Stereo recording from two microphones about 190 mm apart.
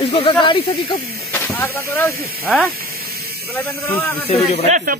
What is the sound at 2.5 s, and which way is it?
Speech, 5° right (ahead or behind).